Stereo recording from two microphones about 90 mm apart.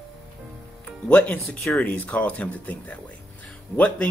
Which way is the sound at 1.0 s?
10° left (ahead or behind).